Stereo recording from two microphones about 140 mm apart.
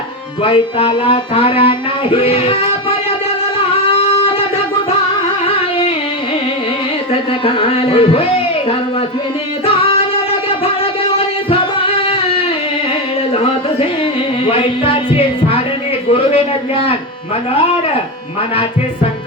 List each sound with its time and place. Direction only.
0.4 s speech: 40° left (ahead or behind)
3.8 s singing: 45° left (ahead or behind)
5.5 s carnatic music: 40° left (ahead or behind)
7.1 s a sound: 40° left (ahead or behind)
9.6 s singing: 40° left (ahead or behind)
11.4 s singing: 40° left (ahead or behind)
13.3 s music: 40° left (ahead or behind)
16.1 s a sound: 40° left (ahead or behind)